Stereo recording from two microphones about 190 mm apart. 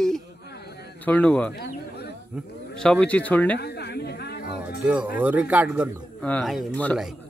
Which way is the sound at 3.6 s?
60° left (ahead or behind).